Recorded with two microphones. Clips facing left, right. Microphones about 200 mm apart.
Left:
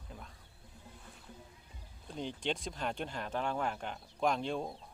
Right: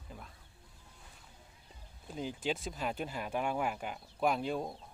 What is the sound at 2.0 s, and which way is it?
Speech, 5° right (ahead or behind).